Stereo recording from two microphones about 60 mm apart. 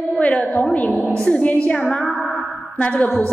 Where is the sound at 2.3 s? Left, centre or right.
Centre.